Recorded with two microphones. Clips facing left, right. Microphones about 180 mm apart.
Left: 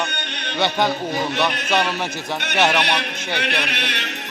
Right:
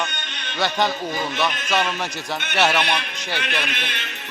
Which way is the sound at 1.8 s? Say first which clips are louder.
Left 2 dB; 5° left (ahead or behind).